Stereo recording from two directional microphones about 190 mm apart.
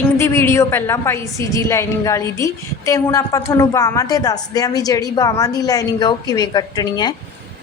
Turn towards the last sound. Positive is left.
turn(degrees=20)  # may be behind; listen again after turning